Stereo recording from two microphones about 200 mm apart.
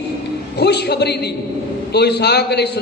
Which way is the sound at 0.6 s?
55° left (ahead or behind).